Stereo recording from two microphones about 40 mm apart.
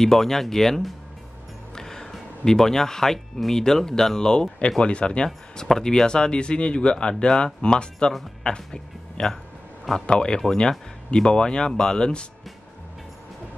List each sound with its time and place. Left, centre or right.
0.0 s speech: centre
1.8 s music: centre
2.4 s speech: centre